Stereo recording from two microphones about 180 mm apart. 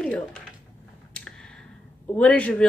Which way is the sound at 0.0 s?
5° left (ahead or behind).